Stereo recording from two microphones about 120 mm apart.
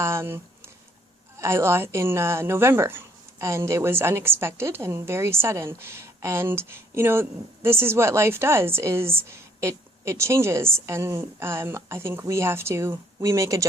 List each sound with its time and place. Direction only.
0.0 s speech: 20° right (ahead or behind)